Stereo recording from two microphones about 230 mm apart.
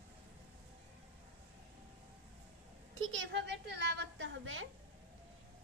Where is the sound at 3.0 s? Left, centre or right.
Right.